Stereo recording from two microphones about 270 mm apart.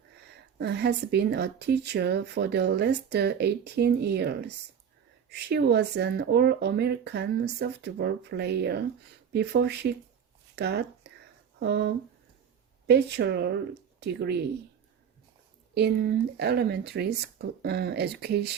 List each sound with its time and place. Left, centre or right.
0.2 s speech: right
12.9 s speech: right
15.7 s speech: right